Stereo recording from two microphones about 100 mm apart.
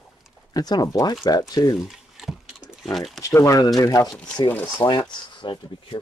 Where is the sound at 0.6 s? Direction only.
40° left (ahead or behind).